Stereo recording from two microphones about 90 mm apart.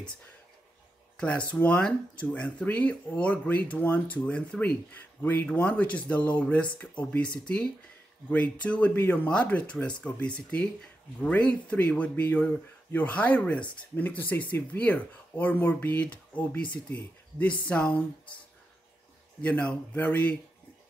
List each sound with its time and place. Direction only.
1.5 s speech: 15° left (ahead or behind)
19.4 s speech: 15° left (ahead or behind)